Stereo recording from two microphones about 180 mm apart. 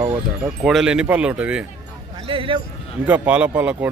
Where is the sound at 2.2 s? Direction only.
30° right (ahead or behind).